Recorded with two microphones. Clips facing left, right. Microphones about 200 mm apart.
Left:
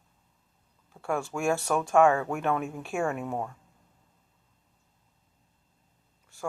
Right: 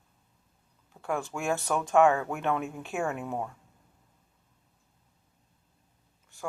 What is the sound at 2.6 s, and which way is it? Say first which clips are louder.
Speech: left 2 dB; 20° right (ahead or behind).